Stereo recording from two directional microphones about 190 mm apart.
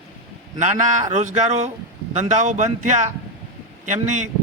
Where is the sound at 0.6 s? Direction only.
40° right (ahead or behind).